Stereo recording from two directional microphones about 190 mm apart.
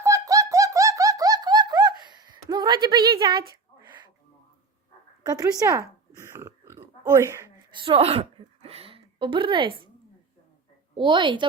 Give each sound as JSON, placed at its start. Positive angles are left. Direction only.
{"t": 0.0, "sound": "laughter", "side_deg": -15}
{"t": 3.5, "sound": "a sound", "side_deg": -25}
{"t": 5.2, "sound": "oink", "side_deg": -20}
{"t": 7.8, "sound": "a woman's voice", "side_deg": -30}
{"t": 10.9, "sound": "a woman's voice", "side_deg": -25}